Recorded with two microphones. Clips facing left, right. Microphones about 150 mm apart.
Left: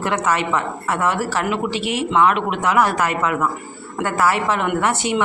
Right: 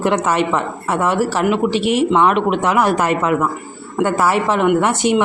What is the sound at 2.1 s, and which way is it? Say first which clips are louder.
Speech: right 3 dB; 25° right (ahead or behind).